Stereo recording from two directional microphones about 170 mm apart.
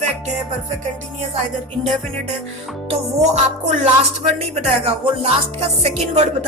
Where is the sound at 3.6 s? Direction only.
45° right (ahead or behind).